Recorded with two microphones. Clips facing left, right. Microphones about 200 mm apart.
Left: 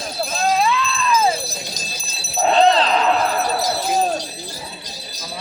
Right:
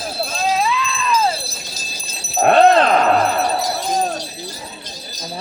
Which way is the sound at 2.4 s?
55° right (ahead or behind).